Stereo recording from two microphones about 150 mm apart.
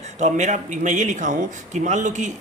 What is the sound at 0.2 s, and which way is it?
A man's voice, 50° right (ahead or behind).